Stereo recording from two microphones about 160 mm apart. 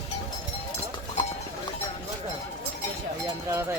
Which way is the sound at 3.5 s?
15° right (ahead or behind).